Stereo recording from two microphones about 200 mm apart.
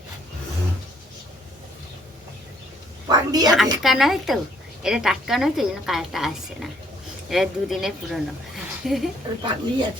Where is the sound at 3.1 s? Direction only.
20° right (ahead or behind).